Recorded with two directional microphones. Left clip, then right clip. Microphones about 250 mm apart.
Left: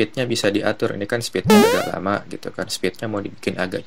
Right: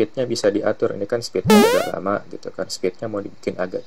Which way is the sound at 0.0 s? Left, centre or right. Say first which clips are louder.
Right 1 dB; left.